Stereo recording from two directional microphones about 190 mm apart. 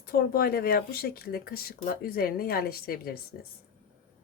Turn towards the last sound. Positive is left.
turn(degrees=50)  # may be behind; listen again after turning